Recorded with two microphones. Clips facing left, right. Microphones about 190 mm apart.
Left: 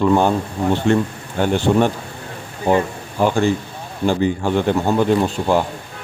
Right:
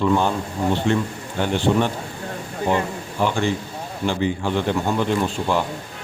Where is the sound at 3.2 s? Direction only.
45° left (ahead or behind).